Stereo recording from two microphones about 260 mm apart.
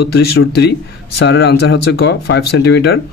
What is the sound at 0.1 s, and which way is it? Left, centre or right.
Speech, left.